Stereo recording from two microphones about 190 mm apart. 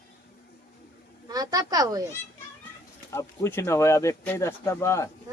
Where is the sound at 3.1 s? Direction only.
15° left (ahead or behind).